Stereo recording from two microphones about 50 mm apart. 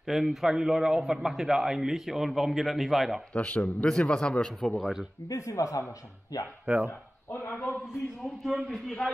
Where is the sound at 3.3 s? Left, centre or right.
Left.